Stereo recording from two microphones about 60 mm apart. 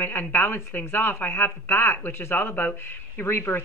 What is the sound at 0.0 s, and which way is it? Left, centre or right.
Speech, left.